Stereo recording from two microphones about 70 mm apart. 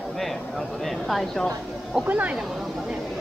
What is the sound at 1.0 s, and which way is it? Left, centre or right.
Speech, centre.